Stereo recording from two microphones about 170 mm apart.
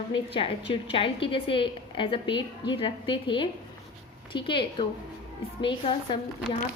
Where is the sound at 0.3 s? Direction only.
30° left (ahead or behind).